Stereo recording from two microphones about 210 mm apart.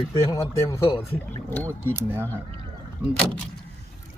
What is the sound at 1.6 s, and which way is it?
Speech, 10° right (ahead or behind).